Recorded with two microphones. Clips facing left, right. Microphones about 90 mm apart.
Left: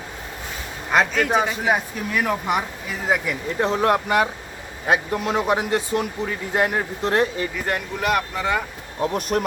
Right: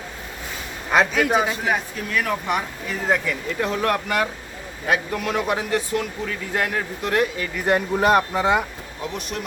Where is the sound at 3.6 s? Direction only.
25° left (ahead or behind).